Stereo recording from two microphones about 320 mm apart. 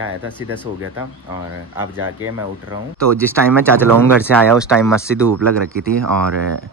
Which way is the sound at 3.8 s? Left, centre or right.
Centre.